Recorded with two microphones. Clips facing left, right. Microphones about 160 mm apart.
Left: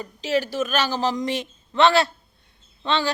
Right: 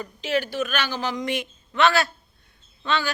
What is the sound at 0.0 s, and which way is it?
A woman's voice, 35° left (ahead or behind).